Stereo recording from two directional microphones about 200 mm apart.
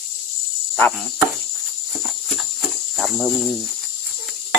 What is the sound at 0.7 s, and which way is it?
Speech, 5° left (ahead or behind).